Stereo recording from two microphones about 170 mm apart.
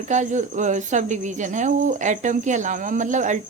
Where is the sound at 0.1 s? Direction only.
45° right (ahead or behind).